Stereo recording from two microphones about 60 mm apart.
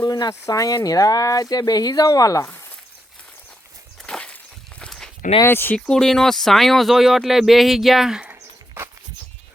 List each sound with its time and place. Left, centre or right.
0.0 s speech: left
0.9 s speech: left
2.4 s speech: left
4.0 s walk: centre
4.9 s a sound: centre
5.5 s speech: left
5.9 s speech: centre